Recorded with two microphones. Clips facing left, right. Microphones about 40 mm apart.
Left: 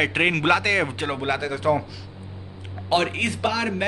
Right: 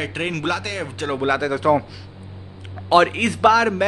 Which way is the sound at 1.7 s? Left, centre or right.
Right.